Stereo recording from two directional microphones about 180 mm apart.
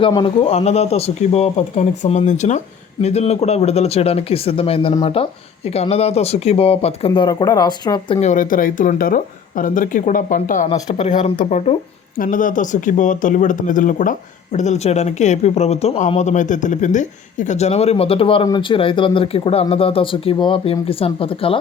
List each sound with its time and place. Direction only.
0.0 s speech: 30° left (ahead or behind)
8.3 s speech: 50° left (ahead or behind)
12.1 s speech: 50° left (ahead or behind); by 21.6 s 30° left (ahead or behind)